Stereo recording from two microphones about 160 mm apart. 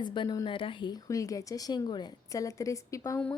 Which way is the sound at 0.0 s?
30° left (ahead or behind).